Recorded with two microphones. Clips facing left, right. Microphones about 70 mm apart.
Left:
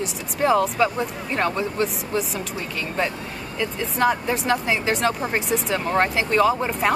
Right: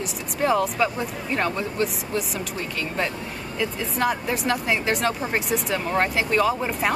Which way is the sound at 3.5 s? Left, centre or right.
Centre.